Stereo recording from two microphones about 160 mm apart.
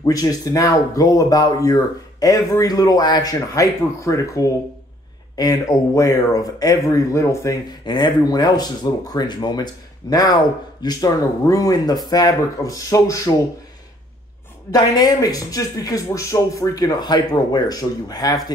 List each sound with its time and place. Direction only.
0.0 s speech: 20° left (ahead or behind)
14.7 s speech: 20° left (ahead or behind)